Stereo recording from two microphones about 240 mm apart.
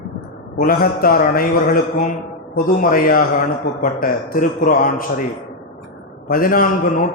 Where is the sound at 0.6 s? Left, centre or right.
Left.